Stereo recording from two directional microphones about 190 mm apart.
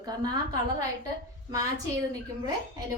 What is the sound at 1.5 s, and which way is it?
Speech, 20° right (ahead or behind).